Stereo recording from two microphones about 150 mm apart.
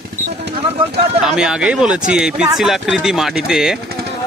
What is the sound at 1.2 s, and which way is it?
Speech, 5° right (ahead or behind).